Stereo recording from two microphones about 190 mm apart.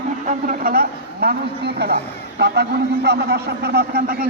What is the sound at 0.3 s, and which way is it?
A woman's voice, 45° right (ahead or behind).